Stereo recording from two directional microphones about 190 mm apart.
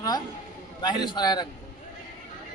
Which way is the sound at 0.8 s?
25° left (ahead or behind).